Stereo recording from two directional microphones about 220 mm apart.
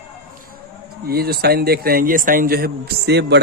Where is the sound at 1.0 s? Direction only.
45° right (ahead or behind).